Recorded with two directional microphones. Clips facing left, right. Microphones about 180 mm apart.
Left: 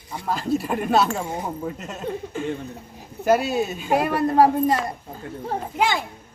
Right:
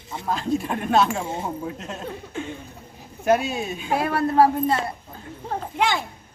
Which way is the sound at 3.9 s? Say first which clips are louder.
Left 1 dB; 15° left (ahead or behind).